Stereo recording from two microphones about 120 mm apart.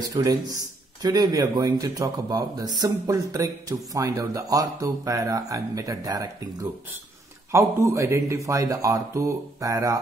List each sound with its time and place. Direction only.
0.1 s a man's voice: 30° right (ahead or behind)